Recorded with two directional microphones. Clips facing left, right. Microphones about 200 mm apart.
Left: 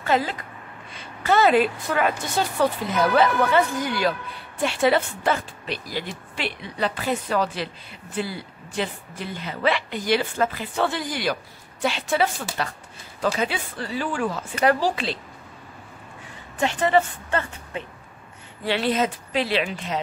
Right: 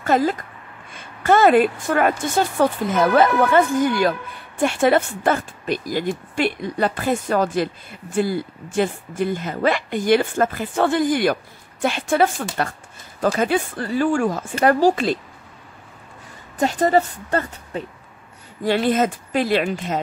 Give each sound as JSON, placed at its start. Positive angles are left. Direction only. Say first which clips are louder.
{"t": 0.0, "sound": "speech", "louder": "right 4 dB", "side_deg": -45}
{"t": 16.5, "sound": "speech", "louder": "right 3 dB", "side_deg": -40}